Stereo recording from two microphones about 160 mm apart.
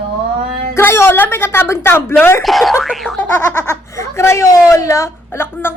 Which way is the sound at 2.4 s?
Centre (ahead or behind).